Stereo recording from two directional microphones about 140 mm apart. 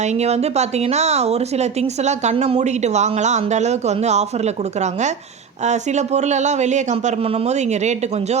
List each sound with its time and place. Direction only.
0.0 s speech: 55° right (ahead or behind)